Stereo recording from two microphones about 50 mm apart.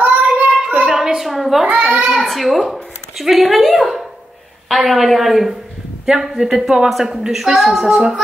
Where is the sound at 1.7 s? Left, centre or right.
Right.